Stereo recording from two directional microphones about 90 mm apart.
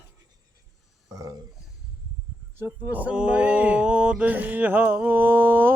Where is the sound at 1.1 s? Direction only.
40° right (ahead or behind).